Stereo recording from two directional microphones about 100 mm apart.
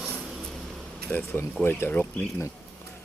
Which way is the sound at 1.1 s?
20° left (ahead or behind).